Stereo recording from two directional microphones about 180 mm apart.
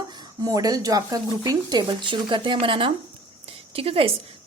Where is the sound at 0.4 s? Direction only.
20° right (ahead or behind).